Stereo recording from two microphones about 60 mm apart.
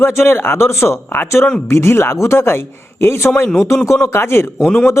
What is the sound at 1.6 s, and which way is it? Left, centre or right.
Speech, left.